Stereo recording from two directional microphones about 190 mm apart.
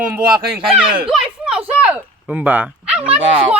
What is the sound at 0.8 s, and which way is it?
Speech, 25° right (ahead or behind).